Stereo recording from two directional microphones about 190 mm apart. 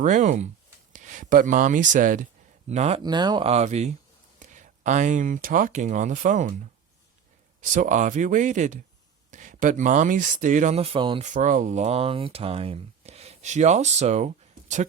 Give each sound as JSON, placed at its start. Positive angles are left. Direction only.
{"t": 0.0, "sound": "speech", "side_deg": -40}
{"t": 3.0, "sound": "speech", "side_deg": -20}
{"t": 7.6, "sound": "speech", "side_deg": -40}
{"t": 11.3, "sound": "speech", "side_deg": -40}